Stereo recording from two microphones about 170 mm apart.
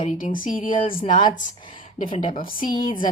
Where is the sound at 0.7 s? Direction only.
30° left (ahead or behind).